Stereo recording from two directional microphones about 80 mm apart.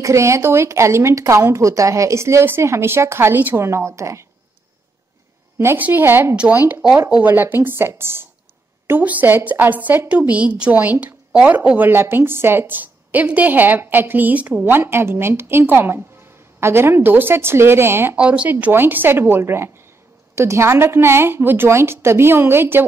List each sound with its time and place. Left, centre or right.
0.0 s speech: right
5.8 s a woman's voice: right
6.3 s a woman's voice: centre; by 18.1 s right
18.1 s a woman's voice: centre